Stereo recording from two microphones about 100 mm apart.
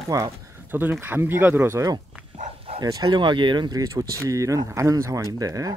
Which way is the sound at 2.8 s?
45° right (ahead or behind).